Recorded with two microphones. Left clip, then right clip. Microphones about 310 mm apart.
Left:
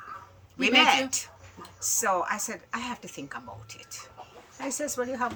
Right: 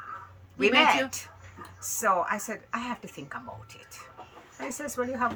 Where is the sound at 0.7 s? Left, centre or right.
Centre.